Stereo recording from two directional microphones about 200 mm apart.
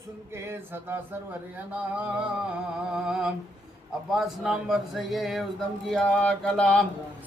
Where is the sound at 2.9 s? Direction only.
5° right (ahead or behind).